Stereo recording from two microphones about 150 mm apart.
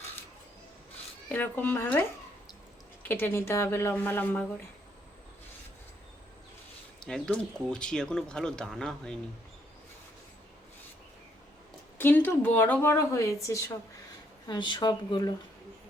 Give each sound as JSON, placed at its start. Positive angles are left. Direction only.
{"t": 1.3, "sound": "a woman's voice", "side_deg": 10}
{"t": 7.0, "sound": "speech", "side_deg": 5}
{"t": 11.9, "sound": "a woman's voice", "side_deg": 15}